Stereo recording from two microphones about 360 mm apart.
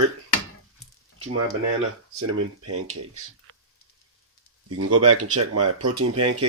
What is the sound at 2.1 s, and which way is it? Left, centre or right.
Speech, right.